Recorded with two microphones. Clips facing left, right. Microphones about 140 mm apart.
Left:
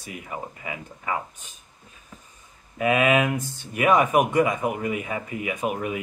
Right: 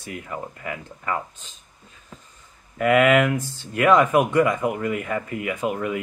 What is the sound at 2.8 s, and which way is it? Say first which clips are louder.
Speech: right 3 dB; 15° left (ahead or behind).